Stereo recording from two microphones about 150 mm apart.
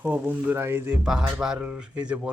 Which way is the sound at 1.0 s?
5° right (ahead or behind).